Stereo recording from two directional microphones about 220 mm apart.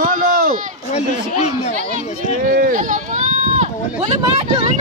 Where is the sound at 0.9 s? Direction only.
30° left (ahead or behind).